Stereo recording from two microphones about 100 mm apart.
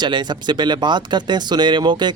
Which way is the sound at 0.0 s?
45° right (ahead or behind).